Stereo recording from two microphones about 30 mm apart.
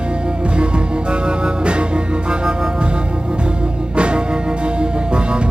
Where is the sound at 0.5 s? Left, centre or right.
Right.